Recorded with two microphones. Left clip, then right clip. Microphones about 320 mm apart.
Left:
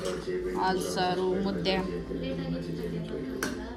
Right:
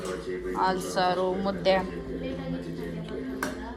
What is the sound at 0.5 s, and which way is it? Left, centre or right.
Speech, centre.